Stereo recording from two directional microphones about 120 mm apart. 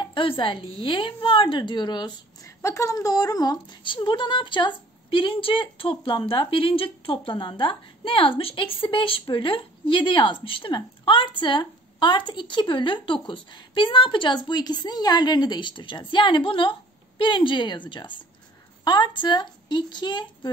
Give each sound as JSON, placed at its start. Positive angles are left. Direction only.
{"t": 0.0, "sound": "speech", "side_deg": 45}
{"t": 2.6, "sound": "a woman's voice", "side_deg": 25}